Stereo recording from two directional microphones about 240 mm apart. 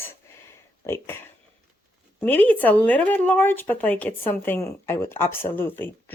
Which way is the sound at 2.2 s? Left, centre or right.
Centre.